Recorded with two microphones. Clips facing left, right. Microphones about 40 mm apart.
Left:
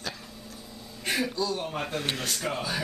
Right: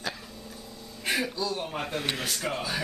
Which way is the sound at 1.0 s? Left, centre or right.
Centre.